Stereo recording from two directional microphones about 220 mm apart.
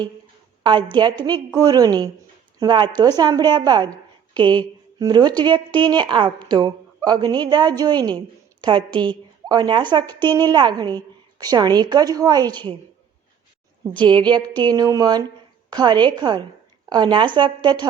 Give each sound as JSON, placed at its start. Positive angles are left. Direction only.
{"t": 0.6, "sound": "a woman's voice", "side_deg": -20}
{"t": 13.8, "sound": "a woman's voice", "side_deg": -20}